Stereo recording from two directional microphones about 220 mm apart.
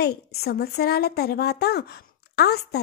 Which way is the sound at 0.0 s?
45° left (ahead or behind).